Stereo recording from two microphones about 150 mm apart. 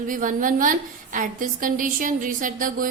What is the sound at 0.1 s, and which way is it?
A woman's voice, 60° right (ahead or behind).